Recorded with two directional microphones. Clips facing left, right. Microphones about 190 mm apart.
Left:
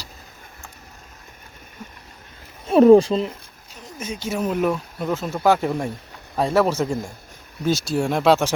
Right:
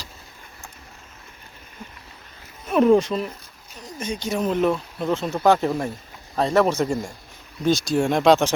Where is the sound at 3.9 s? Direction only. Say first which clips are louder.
Right 1 dB; 5° left (ahead or behind).